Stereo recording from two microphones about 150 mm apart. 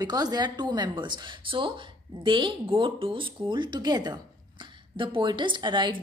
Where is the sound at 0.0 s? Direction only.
25° right (ahead or behind).